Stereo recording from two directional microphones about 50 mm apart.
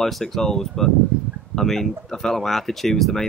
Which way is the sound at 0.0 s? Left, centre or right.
Centre.